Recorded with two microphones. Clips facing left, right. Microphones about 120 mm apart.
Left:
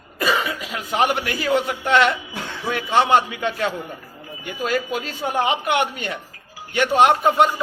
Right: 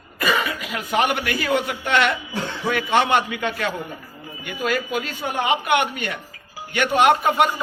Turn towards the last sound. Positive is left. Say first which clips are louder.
# left 1 dB
turn(degrees=30)  # may be behind; listen again after turning